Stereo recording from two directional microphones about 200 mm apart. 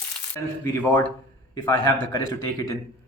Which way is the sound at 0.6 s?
10° left (ahead or behind).